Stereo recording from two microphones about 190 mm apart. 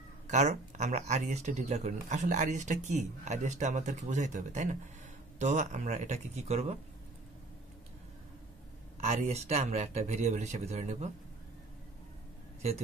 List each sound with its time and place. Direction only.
0.3 s speech: 35° right (ahead or behind)
9.0 s speech: 35° right (ahead or behind)